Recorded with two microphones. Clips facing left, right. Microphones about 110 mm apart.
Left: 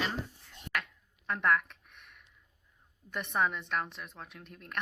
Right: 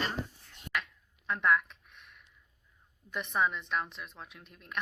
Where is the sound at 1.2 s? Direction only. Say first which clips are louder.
Right 1 dB; 60° left (ahead or behind).